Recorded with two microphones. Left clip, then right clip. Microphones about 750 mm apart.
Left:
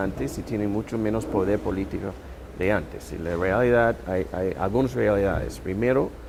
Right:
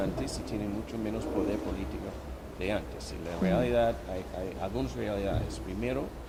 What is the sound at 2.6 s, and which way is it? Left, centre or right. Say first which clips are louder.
Speech: left 9 dB; left.